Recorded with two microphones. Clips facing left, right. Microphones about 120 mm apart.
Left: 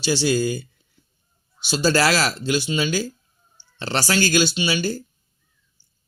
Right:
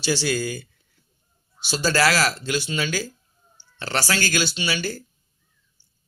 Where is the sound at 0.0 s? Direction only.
20° left (ahead or behind).